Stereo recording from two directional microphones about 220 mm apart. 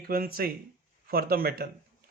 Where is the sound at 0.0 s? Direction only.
40° right (ahead or behind).